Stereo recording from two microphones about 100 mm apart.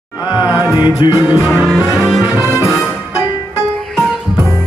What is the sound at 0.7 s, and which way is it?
Music, 50° left (ahead or behind).